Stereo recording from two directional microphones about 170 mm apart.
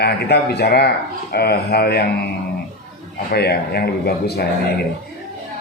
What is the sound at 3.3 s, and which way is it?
A man's voice, 70° left (ahead or behind).